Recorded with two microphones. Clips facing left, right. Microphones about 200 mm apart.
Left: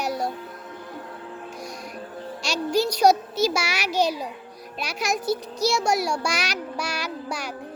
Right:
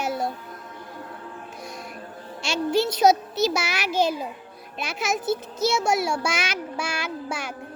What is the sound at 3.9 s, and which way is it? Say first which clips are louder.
Speech: even; 45° right (ahead or behind).